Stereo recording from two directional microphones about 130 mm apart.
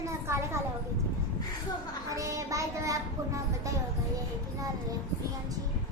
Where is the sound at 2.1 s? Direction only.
25° right (ahead or behind).